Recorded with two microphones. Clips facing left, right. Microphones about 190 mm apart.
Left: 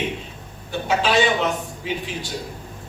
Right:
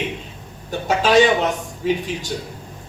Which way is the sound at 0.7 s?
45° right (ahead or behind).